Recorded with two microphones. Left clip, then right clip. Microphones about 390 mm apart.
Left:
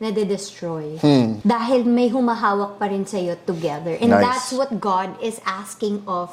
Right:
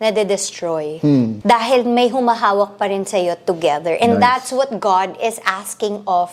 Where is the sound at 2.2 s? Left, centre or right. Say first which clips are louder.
Right 5 dB; right.